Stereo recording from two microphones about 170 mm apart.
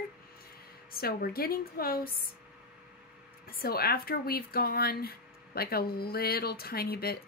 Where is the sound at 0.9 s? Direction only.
60° left (ahead or behind).